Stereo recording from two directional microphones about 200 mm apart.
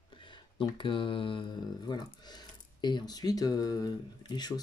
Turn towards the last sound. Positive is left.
turn(degrees=20)  # may be behind; listen again after turning